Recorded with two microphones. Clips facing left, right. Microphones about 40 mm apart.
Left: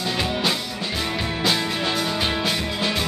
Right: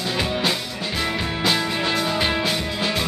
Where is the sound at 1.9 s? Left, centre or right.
Centre.